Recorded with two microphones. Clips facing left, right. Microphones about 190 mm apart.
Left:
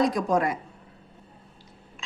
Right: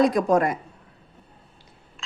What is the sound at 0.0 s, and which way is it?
Speech, 60° right (ahead or behind).